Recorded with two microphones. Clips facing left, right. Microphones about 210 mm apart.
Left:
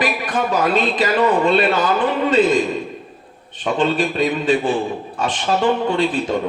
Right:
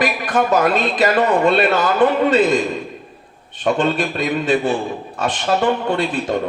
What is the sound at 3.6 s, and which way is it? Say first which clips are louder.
Speech: right 1 dB; 45° right (ahead or behind).